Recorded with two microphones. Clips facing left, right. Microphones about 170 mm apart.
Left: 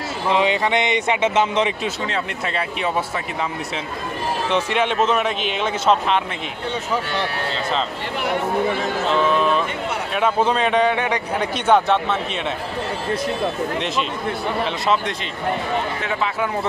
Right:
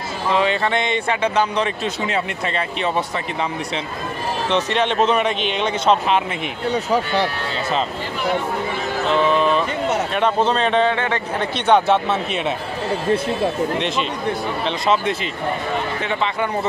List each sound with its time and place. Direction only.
0.3 s speech: 15° left (ahead or behind)
2.4 s a man's voice: 5° left (ahead or behind)
4.5 s a man's voice: 10° left (ahead or behind)
6.7 s speech: 35° right (ahead or behind)
9.1 s a man's voice: centre (ahead or behind)
13.7 s a man's voice: centre (ahead or behind)
16.0 s a man's voice: centre (ahead or behind)